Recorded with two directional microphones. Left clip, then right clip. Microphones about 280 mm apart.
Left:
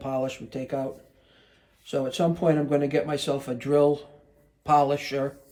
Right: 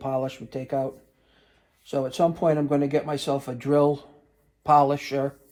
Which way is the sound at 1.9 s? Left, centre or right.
Centre.